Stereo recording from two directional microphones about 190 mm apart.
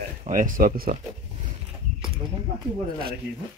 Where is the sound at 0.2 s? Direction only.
45° right (ahead or behind).